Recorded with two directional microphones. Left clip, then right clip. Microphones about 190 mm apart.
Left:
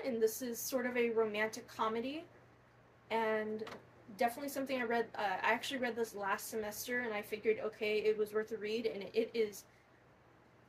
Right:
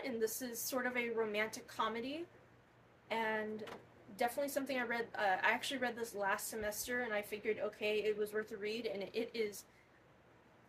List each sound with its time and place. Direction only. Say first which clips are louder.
0.0 s a woman's voice: left 4 dB; 20° right (ahead or behind)